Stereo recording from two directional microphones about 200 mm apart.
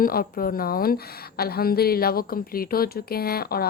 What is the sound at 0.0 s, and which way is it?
A woman's voice, 45° left (ahead or behind).